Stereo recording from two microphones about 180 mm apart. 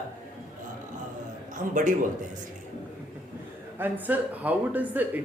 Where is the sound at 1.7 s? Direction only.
45° right (ahead or behind).